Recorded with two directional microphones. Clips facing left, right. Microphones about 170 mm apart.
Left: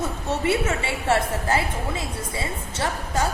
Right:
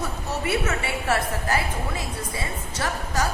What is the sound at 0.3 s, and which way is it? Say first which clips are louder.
A woman's voice: left 3 dB; 25° left (ahead or behind).